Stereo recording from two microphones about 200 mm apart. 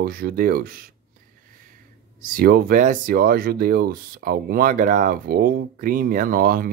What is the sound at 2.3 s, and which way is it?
Speech, 45° right (ahead or behind).